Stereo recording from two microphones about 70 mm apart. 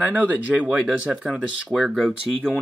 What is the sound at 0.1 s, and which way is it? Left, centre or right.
Speech, centre.